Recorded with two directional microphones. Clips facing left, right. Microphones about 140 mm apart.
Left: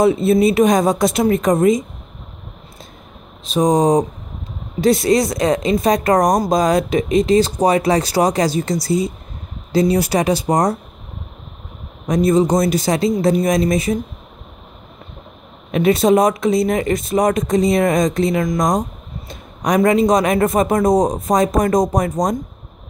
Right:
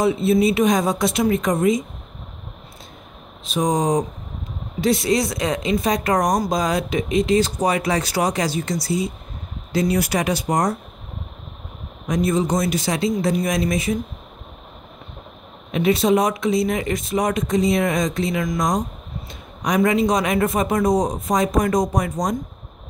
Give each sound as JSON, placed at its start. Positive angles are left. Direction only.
{"t": 0.0, "sound": "speech", "side_deg": 45}
{"t": 3.4, "sound": "speech", "side_deg": 35}
{"t": 12.1, "sound": "speech", "side_deg": 35}
{"t": 15.7, "sound": "speech", "side_deg": 50}